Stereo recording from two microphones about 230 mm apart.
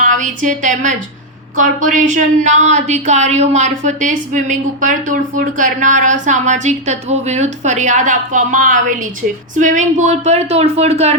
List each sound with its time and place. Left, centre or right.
0.0 s a woman's voice: right